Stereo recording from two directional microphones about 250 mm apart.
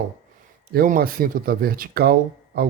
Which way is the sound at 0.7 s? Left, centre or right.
Right.